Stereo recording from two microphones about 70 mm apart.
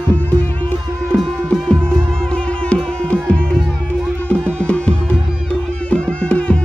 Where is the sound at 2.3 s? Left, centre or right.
Centre.